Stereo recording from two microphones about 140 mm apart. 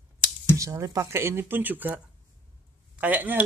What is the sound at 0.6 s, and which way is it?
Speech, 25° right (ahead or behind).